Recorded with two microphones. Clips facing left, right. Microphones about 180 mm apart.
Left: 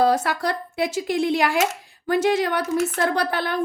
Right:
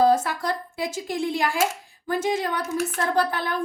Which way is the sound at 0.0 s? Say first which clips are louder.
Even; 70° left (ahead or behind).